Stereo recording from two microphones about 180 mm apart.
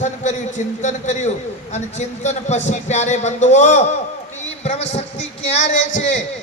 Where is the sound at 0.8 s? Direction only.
40° left (ahead or behind).